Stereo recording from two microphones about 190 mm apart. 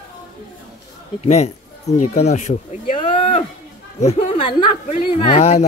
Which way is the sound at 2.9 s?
25° left (ahead or behind).